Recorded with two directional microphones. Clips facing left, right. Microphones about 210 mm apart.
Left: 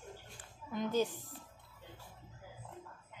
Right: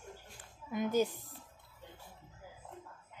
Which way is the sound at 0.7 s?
10° right (ahead or behind).